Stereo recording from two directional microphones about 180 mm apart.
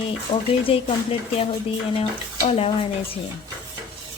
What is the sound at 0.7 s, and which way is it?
Speech, 30° left (ahead or behind).